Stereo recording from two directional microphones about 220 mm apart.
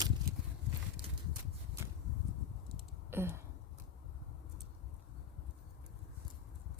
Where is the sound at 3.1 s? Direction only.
10° right (ahead or behind).